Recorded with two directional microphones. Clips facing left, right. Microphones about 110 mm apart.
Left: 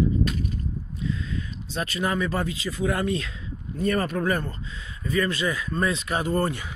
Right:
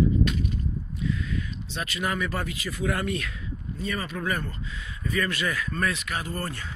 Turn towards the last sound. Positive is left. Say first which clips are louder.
# left 8 dB
turn(degrees=20)  # may be behind; listen again after turning